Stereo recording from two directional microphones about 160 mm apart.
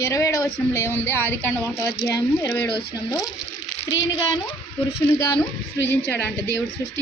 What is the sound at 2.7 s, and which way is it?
Speech, 90° left.